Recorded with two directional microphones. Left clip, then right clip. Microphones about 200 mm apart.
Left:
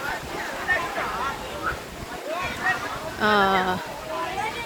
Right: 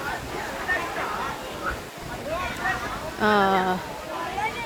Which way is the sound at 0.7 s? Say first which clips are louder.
Left 2 dB; 40° left (ahead or behind).